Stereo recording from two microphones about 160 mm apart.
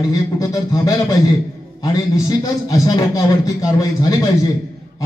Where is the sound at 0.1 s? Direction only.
20° left (ahead or behind).